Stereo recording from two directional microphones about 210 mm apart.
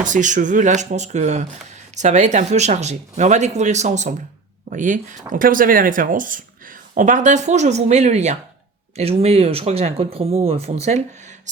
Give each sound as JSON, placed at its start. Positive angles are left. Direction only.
{"t": 0.0, "sound": "speech", "side_deg": -35}